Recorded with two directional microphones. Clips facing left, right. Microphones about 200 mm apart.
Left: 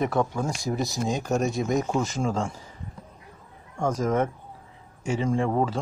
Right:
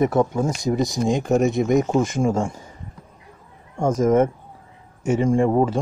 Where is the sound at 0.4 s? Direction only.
20° right (ahead or behind).